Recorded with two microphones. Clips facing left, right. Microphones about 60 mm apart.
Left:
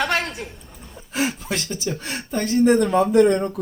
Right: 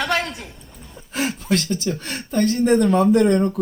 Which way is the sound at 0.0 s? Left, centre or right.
Left.